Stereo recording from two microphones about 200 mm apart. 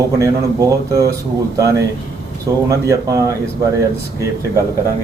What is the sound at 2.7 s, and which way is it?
Speech, 15° right (ahead or behind).